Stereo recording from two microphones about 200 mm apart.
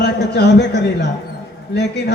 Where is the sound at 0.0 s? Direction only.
55° left (ahead or behind).